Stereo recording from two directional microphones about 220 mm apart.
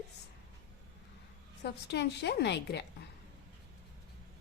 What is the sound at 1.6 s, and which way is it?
A woman's voice, 50° left (ahead or behind).